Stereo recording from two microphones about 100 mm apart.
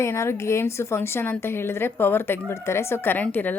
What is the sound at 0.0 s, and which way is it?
A woman's voice, 25° left (ahead or behind).